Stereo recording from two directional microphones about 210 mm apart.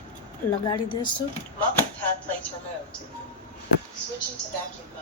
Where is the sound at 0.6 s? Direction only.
20° left (ahead or behind).